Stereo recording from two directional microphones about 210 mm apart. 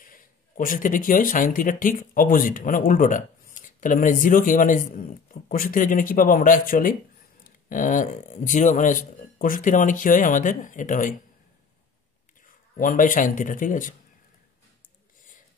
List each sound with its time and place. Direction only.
0.0 s speech: 40° left (ahead or behind)
12.7 s speech: 40° left (ahead or behind)